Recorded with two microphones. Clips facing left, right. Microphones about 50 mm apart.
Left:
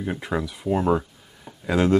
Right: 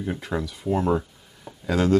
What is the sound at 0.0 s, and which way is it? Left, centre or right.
Speech, centre.